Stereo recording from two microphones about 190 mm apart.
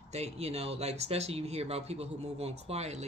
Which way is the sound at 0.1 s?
35° right (ahead or behind).